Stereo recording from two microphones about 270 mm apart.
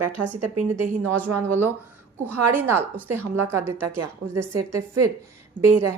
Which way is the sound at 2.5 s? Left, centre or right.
Centre.